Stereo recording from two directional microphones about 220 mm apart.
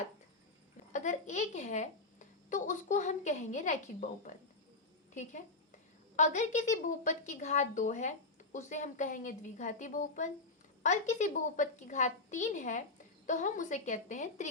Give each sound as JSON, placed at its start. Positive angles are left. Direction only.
{"t": 0.9, "sound": "a woman's voice", "side_deg": 35}
{"t": 6.1, "sound": "a woman's voice", "side_deg": 35}